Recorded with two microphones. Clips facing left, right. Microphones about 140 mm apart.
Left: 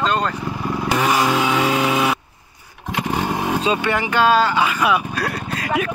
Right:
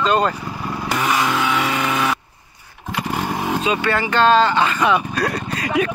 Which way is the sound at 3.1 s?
15° left (ahead or behind).